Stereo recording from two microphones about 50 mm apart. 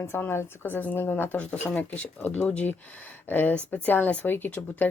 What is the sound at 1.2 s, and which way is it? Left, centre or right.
Speech, left.